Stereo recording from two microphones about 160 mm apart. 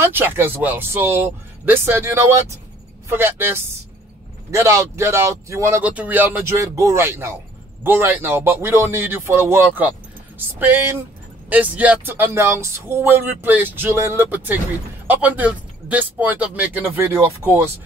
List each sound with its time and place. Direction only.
0.0 s speech: 15° right (ahead or behind)